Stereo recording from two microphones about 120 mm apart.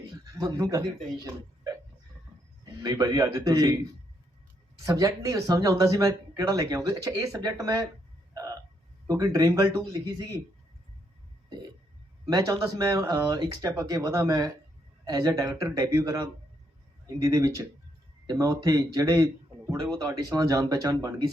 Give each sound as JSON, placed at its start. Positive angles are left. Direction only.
{"t": 0.0, "sound": "a sound", "side_deg": -30}
{"t": 2.6, "sound": "speech", "side_deg": -30}
{"t": 4.9, "sound": "speech", "side_deg": -30}
{"t": 8.3, "sound": "hiccup", "side_deg": -30}
{"t": 9.0, "sound": "speech", "side_deg": -30}
{"t": 12.3, "sound": "speech", "side_deg": -30}